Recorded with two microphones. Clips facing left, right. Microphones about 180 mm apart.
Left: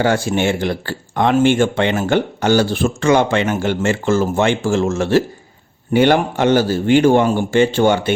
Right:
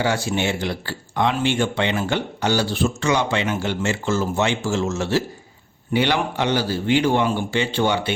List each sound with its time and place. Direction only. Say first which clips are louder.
0.0 s speech: left 5 dB; 50° left (ahead or behind)